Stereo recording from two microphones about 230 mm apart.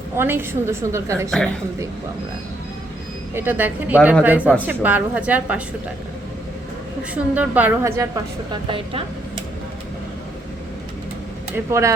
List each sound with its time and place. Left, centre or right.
0.2 s speech: centre
3.3 s speech: centre
7.1 s speech: centre
8.7 s speech: right
11.5 s speech: centre